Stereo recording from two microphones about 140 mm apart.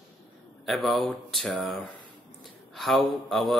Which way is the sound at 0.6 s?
Centre (ahead or behind).